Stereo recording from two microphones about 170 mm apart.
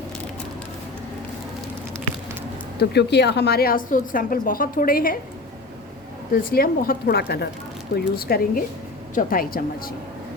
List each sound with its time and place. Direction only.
2.7 s a woman's voice: 80° left; by 5.1 s 60° left (ahead or behind)
6.3 s a woman's voice: 60° left (ahead or behind)